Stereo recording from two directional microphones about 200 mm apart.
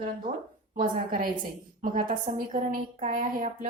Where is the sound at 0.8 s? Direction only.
45° right (ahead or behind).